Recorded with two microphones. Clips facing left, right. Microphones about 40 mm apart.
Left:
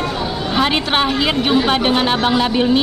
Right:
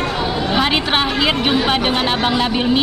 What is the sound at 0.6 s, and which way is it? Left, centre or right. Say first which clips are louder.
Speech: left 2 dB; centre.